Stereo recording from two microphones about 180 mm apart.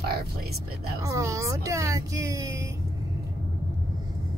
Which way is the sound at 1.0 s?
15° right (ahead or behind).